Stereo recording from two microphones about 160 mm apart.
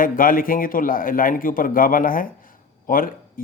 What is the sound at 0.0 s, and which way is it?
A man's voice, 60° left (ahead or behind).